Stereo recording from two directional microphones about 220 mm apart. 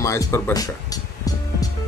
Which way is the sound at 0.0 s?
15° left (ahead or behind).